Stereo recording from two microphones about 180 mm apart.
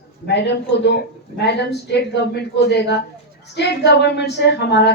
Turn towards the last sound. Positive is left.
turn(degrees=70)  # may be behind; listen again after turning